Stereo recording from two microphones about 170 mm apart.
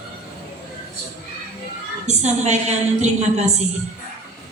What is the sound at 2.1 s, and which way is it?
A man's voice, 40° right (ahead or behind).